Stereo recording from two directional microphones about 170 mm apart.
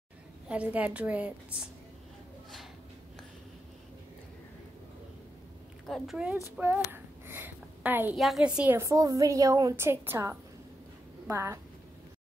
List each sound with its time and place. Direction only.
0.5 s a woman's voice: 10° right (ahead or behind)
5.9 s a woman's voice: centre (ahead or behind)
6.9 s a sound: 10° right (ahead or behind)
8.2 s a woman's voice: centre (ahead or behind)